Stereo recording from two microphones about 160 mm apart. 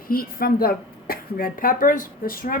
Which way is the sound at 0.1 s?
65° left (ahead or behind).